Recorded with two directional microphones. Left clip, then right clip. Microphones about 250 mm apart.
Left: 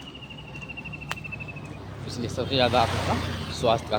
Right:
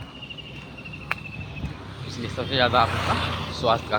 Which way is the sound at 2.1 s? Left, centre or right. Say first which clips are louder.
Right 1 dB; centre.